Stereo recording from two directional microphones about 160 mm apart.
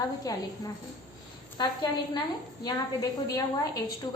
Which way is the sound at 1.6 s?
25° left (ahead or behind).